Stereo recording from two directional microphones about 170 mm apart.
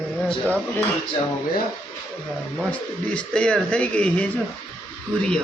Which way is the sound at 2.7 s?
5° left (ahead or behind).